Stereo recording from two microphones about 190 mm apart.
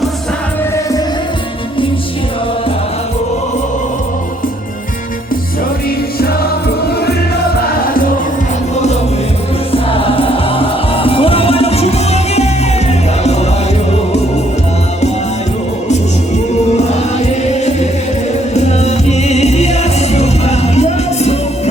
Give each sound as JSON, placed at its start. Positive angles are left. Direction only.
{"t": 9.7, "sound": "music", "side_deg": 30}
{"t": 16.7, "sound": "music", "side_deg": 35}